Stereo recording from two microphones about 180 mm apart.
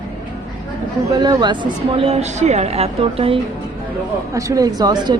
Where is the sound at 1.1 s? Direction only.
25° right (ahead or behind).